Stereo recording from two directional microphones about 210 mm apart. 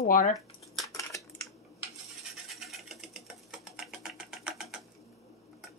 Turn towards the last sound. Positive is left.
turn(degrees=-5)  # may be behind; listen again after turning